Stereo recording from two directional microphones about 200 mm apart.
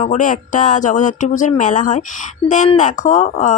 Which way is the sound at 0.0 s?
40° left (ahead or behind).